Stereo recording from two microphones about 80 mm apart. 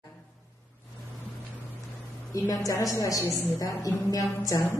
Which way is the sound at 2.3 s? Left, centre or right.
Left.